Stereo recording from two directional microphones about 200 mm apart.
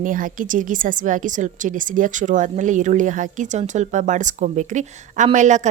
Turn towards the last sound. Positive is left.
turn(degrees=-35)  # may be behind; listen again after turning